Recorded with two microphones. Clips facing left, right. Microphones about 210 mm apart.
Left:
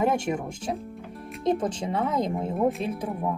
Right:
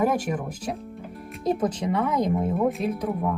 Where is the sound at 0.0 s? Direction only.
25° left (ahead or behind).